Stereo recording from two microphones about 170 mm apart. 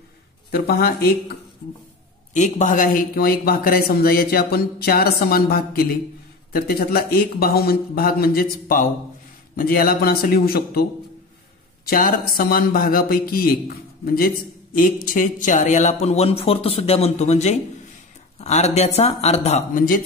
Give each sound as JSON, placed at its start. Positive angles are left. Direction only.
{"t": 0.5, "sound": "speech", "side_deg": 60}
{"t": 2.3, "sound": "speech", "side_deg": 45}
{"t": 11.9, "sound": "a man's voice", "side_deg": 55}
{"t": 19.7, "sound": "speech", "side_deg": 55}